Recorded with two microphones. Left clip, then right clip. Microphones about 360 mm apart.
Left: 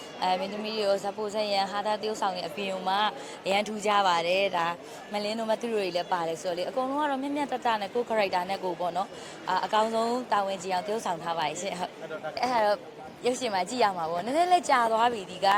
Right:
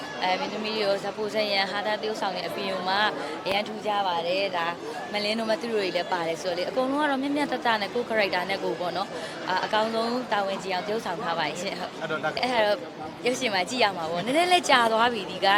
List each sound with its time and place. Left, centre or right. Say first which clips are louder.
0.2 s a woman's voice: right 1 dB; left
5.1 s a woman's voice: right 2 dB; left